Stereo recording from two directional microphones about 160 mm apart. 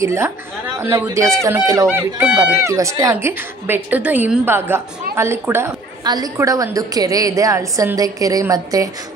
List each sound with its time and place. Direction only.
0.0 s a woman's voice: 15° right (ahead or behind)